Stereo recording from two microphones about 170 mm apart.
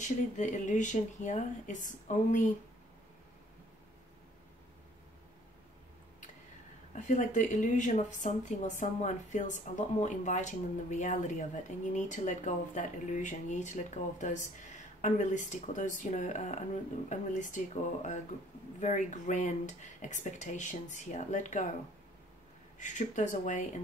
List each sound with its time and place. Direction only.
0.0 s speech: 45° left (ahead or behind)
6.9 s speech: 45° left (ahead or behind)
22.8 s speech: 45° left (ahead or behind)